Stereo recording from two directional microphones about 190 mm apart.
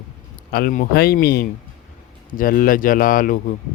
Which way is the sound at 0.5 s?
50° left (ahead or behind).